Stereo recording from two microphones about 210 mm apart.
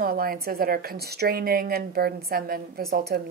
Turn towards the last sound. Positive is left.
turn(degrees=-50)  # may be behind; listen again after turning